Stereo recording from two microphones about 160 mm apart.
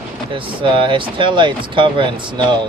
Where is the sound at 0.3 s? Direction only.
30° right (ahead or behind).